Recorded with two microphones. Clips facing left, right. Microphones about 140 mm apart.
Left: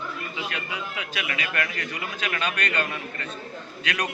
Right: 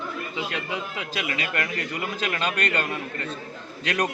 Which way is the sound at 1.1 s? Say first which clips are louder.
Right 1 dB; 30° right (ahead or behind).